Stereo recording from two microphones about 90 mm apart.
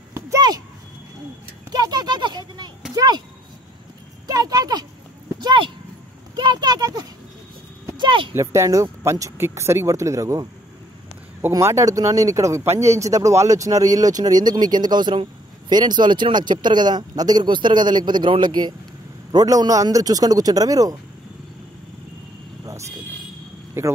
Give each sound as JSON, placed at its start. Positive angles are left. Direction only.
{"t": 1.7, "sound": "speech", "side_deg": -50}
{"t": 4.3, "sound": "speech", "side_deg": -45}
{"t": 5.4, "sound": "a sound", "side_deg": -60}
{"t": 8.0, "sound": "a sound", "side_deg": -65}
{"t": 8.4, "sound": "speech", "side_deg": -35}
{"t": 11.5, "sound": "speech", "side_deg": -35}
{"t": 19.3, "sound": "speech", "side_deg": -45}
{"t": 23.8, "sound": "speech", "side_deg": -30}